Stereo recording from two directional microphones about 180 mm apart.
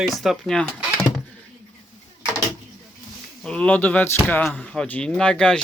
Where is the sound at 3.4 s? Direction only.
5° left (ahead or behind).